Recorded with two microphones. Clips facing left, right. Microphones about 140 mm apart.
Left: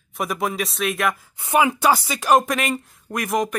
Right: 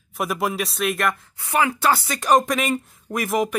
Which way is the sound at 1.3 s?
20° left (ahead or behind).